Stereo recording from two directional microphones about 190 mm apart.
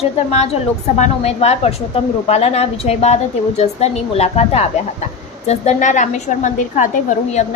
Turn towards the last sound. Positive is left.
turn(degrees=40)  # may be behind; listen again after turning